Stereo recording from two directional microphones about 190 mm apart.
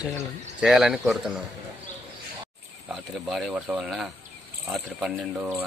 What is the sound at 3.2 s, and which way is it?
Speech, centre (ahead or behind).